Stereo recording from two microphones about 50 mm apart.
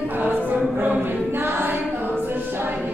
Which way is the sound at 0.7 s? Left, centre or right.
Right.